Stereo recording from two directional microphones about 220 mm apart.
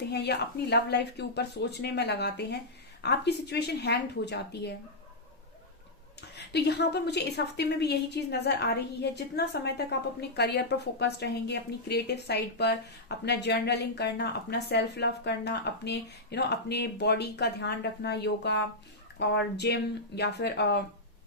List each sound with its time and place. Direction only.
0.1 s a woman's voice: 50° left (ahead or behind)
6.5 s a woman's voice: 50° left (ahead or behind)